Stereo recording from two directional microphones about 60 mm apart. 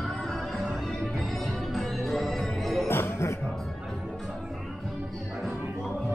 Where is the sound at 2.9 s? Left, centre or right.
Left.